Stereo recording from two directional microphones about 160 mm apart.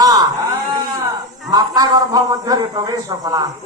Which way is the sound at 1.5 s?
20° right (ahead or behind).